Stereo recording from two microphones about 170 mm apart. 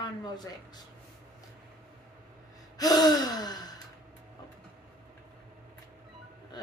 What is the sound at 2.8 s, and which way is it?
Gasp, 20° left (ahead or behind).